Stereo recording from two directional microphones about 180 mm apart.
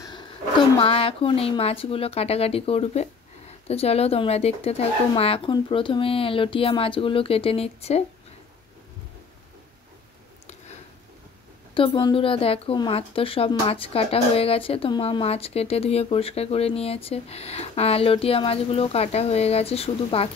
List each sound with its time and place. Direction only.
0.7 s speech: 30° left (ahead or behind)
11.7 s speech: 30° left (ahead or behind)